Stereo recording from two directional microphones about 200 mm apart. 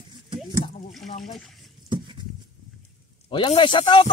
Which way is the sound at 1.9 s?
25° right (ahead or behind).